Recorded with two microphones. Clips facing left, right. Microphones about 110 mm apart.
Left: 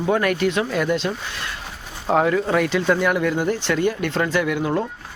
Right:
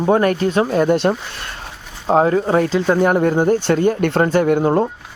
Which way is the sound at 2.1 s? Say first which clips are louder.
Right 4 dB; 35° right (ahead or behind).